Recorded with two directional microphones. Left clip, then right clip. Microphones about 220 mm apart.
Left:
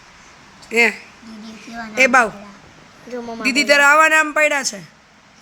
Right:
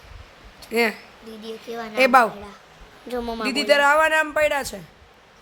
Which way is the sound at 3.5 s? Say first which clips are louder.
Left 5 dB; 5° right (ahead or behind).